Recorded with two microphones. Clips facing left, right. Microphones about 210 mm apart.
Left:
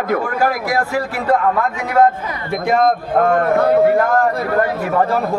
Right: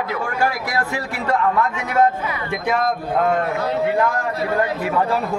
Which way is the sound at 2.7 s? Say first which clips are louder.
Left 6 dB; 50° left (ahead or behind).